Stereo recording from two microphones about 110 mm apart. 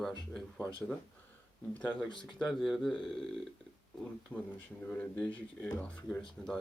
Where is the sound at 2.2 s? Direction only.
5° left (ahead or behind).